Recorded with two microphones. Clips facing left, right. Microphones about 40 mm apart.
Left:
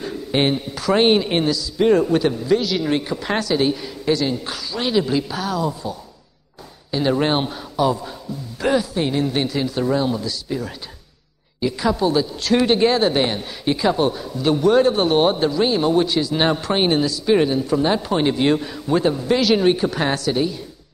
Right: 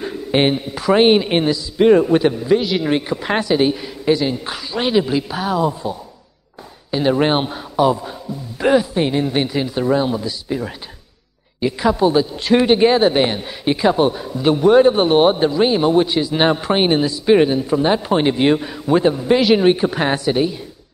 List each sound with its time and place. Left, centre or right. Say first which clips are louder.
0.0 s a man's voice: right 3 dB; centre